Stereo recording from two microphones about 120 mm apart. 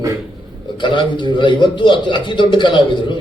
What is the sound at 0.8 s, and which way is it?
A man's voice, 40° left (ahead or behind).